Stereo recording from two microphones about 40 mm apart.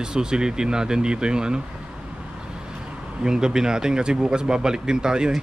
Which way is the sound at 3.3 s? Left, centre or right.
Centre.